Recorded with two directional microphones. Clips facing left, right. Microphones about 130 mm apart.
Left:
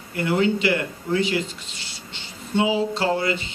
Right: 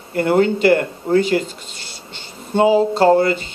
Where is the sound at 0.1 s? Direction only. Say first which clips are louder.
Right 6 dB; 45° right (ahead or behind).